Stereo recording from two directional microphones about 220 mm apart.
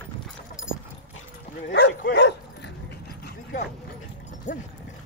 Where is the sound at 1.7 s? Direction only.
50° left (ahead or behind).